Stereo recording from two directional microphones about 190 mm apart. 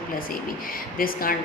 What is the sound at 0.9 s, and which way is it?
Speech, 50° left (ahead or behind).